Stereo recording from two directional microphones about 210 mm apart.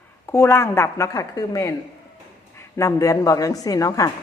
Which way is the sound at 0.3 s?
10° left (ahead or behind).